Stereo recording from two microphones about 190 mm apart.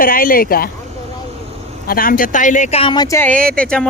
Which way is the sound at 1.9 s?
50° left (ahead or behind).